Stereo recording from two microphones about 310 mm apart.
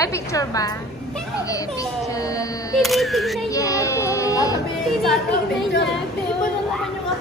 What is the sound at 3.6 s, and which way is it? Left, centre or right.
Child singing, centre.